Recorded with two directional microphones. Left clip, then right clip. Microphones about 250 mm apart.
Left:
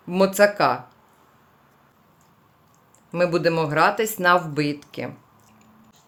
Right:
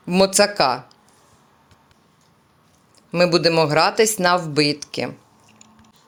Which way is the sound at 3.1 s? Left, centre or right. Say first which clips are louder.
Right 4 dB; centre.